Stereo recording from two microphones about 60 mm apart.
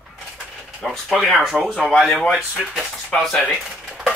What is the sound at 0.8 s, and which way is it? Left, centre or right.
Speech, centre.